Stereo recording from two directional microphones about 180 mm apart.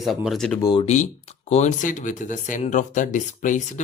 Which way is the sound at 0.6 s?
25° left (ahead or behind).